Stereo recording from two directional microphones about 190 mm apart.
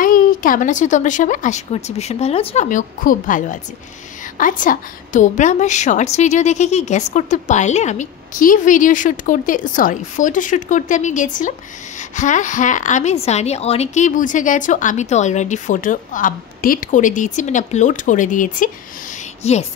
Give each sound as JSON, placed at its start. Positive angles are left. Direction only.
{"t": 0.0, "sound": "a woman's voice", "side_deg": 45}